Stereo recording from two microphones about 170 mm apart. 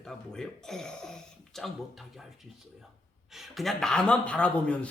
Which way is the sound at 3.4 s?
Centre (ahead or behind).